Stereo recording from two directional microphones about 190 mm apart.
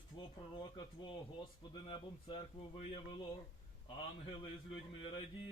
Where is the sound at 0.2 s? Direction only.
25° left (ahead or behind).